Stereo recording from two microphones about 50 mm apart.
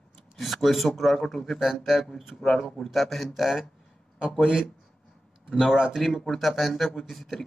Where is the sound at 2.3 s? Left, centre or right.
Centre.